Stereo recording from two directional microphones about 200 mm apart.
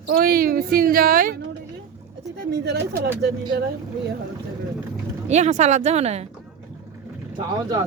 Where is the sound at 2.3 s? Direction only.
55° right (ahead or behind).